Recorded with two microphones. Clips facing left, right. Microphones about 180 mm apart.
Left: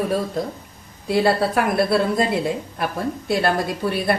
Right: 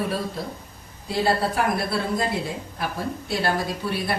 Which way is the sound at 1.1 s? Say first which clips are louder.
Left 5 dB; 60° left (ahead or behind).